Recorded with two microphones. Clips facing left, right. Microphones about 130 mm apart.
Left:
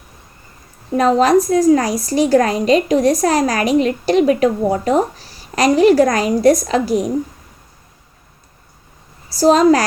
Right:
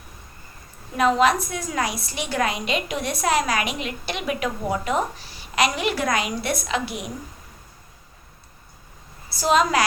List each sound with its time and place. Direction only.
0.9 s a woman's voice: 40° left (ahead or behind)
9.3 s a woman's voice: 35° left (ahead or behind)